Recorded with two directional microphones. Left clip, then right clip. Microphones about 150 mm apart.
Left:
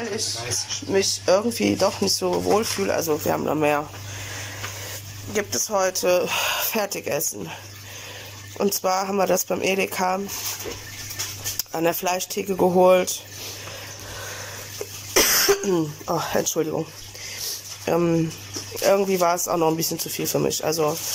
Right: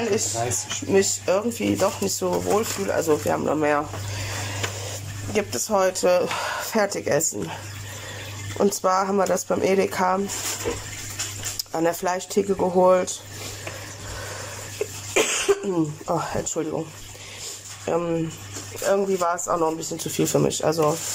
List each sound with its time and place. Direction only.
0.8 s speech: centre (ahead or behind)
5.3 s speech: 10° right (ahead or behind)
8.5 s speech: 5° left (ahead or behind)
11.7 s speech: centre (ahead or behind)
12.4 s speech: 15° left (ahead or behind)
12.7 s speech: 5° left (ahead or behind)
15.1 s speech: 5° right (ahead or behind)
17.8 s speech: 5° left (ahead or behind)
20.0 s speech: centre (ahead or behind)